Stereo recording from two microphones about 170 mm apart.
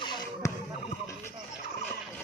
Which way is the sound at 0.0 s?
25° left (ahead or behind).